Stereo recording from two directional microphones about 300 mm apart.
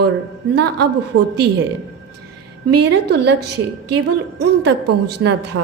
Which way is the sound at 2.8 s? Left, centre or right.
Right.